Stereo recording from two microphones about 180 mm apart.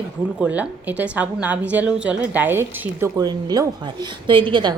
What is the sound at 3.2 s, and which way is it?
A woman's voice, 25° right (ahead or behind).